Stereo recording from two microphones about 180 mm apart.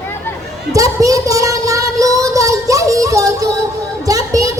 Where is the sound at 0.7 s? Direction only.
20° right (ahead or behind).